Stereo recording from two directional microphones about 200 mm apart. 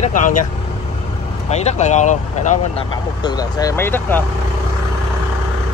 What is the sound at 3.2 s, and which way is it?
Speech, 20° left (ahead or behind).